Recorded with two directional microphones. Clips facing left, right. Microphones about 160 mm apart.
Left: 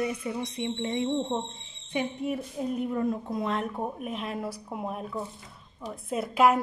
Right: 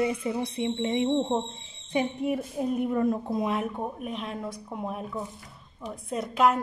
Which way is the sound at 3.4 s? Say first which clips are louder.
Even; 10° right (ahead or behind).